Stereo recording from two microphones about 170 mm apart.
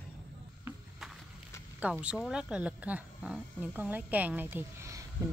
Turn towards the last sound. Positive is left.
turn(degrees=-15)  # may be behind; listen again after turning